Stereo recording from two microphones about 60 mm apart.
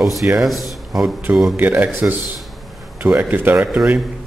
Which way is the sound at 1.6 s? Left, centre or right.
Right.